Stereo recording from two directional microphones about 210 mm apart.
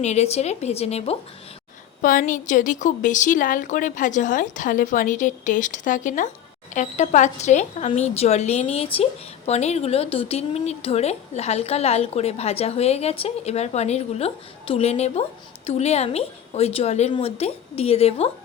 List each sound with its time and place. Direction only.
0.0 s a woman's voice: 30° left (ahead or behind)